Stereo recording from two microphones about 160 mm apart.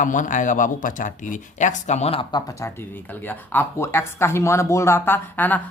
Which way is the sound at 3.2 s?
10° left (ahead or behind).